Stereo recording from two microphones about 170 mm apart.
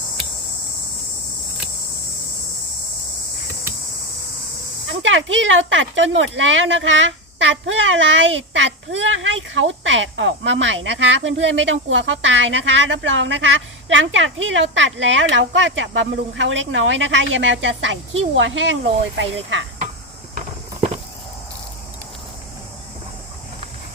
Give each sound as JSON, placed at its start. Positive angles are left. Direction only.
{"t": 4.9, "sound": "speech", "side_deg": -90}